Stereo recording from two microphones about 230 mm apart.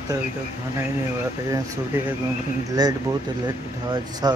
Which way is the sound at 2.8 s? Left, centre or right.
Centre.